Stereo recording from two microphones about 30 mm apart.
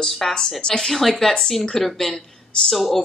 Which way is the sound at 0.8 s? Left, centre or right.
Centre.